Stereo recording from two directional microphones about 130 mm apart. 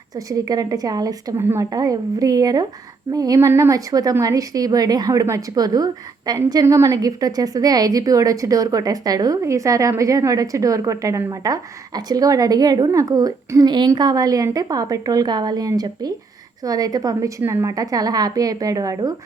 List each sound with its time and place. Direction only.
0.3 s a woman's voice: 30° right (ahead or behind)